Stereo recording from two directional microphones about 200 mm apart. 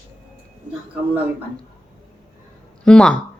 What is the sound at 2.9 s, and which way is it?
Speech, 5° left (ahead or behind).